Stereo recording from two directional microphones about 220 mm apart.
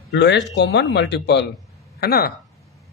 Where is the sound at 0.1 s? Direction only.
50° left (ahead or behind).